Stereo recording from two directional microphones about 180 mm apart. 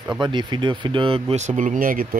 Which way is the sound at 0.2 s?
25° right (ahead or behind).